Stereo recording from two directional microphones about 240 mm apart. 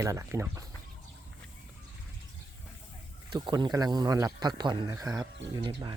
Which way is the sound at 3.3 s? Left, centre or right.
Centre.